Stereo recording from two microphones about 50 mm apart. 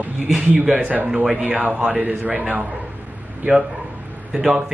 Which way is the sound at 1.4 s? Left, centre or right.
Right.